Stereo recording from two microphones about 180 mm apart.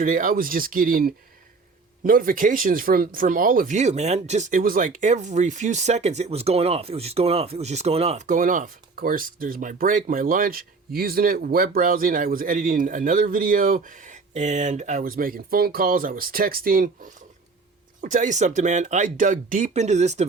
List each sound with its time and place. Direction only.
0.0 s speech: 50° right (ahead or behind)
8.3 s speech: 45° right (ahead or behind)